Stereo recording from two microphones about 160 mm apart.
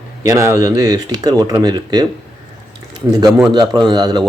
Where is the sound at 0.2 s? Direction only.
20° right (ahead or behind).